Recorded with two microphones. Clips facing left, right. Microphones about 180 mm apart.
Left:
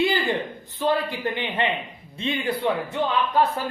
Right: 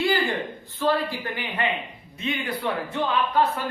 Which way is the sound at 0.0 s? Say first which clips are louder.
Left 1 dB; 20° left (ahead or behind).